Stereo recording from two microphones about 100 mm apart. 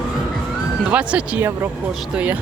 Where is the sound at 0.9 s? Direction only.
10° right (ahead or behind).